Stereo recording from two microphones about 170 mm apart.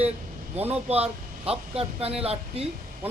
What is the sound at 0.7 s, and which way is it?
Speech, 35° right (ahead or behind).